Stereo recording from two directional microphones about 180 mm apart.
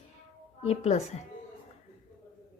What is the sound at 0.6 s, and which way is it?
Speech, 40° left (ahead or behind).